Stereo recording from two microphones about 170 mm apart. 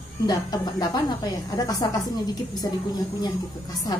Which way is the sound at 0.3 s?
25° left (ahead or behind).